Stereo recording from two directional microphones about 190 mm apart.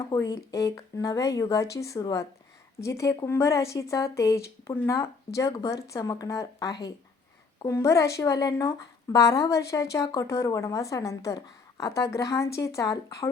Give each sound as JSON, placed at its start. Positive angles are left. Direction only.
{"t": 0.1, "sound": "a woman's voice", "side_deg": 15}